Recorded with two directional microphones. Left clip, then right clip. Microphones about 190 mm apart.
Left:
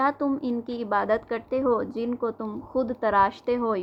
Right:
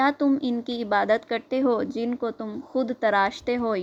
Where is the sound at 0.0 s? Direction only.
30° right (ahead or behind).